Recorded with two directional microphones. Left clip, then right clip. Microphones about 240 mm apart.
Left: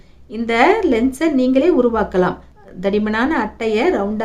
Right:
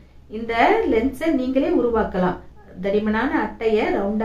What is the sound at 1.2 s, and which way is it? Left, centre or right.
Speech, left.